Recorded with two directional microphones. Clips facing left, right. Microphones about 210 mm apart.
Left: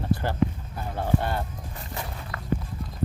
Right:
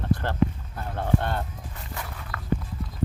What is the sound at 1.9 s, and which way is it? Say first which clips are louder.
Walk: left 2 dB; 25° left (ahead or behind).